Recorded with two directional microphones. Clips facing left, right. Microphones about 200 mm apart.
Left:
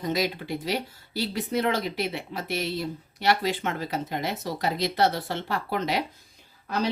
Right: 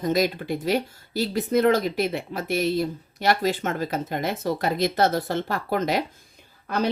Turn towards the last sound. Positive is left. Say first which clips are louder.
# right 3 dB
turn(degrees=-50)  # may be behind; listen again after turning